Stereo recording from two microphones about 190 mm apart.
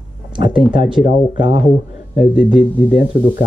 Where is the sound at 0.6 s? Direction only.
Centre (ahead or behind).